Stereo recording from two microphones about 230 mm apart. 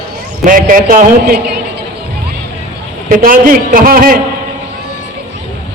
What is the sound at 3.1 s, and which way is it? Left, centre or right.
A man's voice, right.